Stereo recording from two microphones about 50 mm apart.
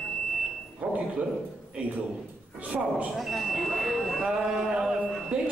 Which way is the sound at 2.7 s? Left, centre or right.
Right.